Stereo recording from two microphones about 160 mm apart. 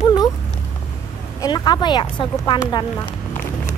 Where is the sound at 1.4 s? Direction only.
25° left (ahead or behind).